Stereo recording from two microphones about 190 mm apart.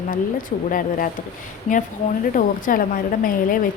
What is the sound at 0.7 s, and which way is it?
Speech, 45° left (ahead or behind).